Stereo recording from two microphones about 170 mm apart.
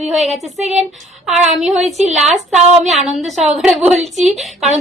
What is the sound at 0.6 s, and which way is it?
Speech, 40° right (ahead or behind).